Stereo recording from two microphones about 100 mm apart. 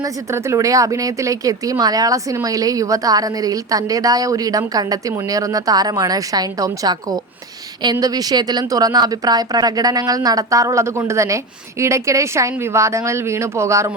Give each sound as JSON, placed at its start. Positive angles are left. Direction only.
{"t": 0.0, "sound": "speech", "side_deg": -30}